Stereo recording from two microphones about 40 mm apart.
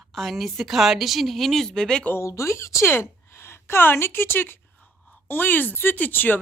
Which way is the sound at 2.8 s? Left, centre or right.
Left.